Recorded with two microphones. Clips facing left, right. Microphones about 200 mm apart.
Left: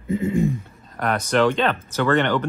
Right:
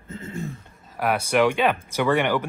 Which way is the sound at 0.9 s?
10° right (ahead or behind).